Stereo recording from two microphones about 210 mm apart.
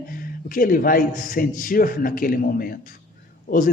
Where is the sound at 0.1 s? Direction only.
40° left (ahead or behind).